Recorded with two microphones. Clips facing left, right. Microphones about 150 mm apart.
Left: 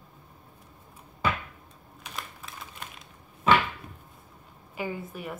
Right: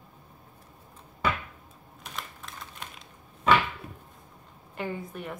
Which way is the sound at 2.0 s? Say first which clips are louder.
Even; 5° left (ahead or behind).